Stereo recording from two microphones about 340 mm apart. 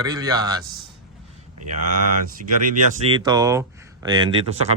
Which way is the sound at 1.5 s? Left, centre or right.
Right.